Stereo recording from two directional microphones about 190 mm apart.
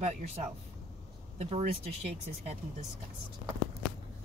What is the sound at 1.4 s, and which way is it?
Speech, 35° right (ahead or behind).